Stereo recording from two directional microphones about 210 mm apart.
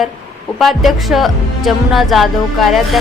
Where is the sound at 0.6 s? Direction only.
Centre (ahead or behind).